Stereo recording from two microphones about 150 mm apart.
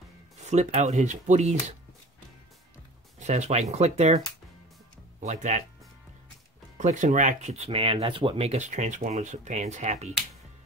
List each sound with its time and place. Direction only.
0.4 s speech: 50° right (ahead or behind)
3.2 s speech: 50° right (ahead or behind)
5.2 s speech: 55° right (ahead or behind)
6.8 s speech: 55° right (ahead or behind)